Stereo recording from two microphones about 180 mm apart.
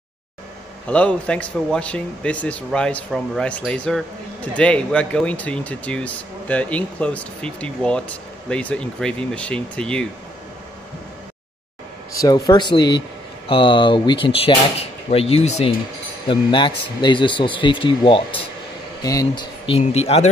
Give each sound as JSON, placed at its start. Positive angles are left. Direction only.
{"t": 0.8, "sound": "speech", "side_deg": 5}
{"t": 12.2, "sound": "speech", "side_deg": 20}